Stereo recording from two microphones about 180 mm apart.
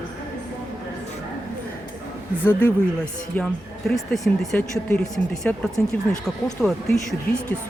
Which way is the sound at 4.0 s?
Centre (ahead or behind).